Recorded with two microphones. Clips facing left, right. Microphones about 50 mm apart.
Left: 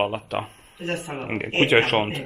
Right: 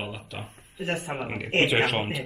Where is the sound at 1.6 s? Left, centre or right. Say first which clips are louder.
Left 5 dB; left.